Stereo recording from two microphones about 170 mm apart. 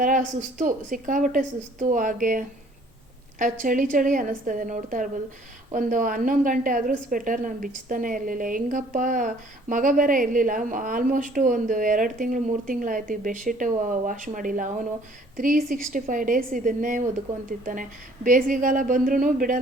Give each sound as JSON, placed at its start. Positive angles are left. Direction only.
{"t": 0.0, "sound": "a woman's voice", "side_deg": -50}